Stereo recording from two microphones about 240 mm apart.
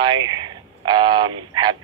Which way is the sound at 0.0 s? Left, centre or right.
Centre.